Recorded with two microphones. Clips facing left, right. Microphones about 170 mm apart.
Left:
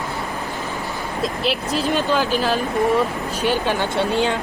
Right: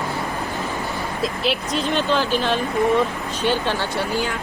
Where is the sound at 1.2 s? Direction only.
Centre (ahead or behind).